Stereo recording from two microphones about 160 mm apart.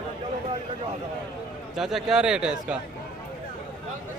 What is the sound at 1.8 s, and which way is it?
Speech, 5° right (ahead or behind).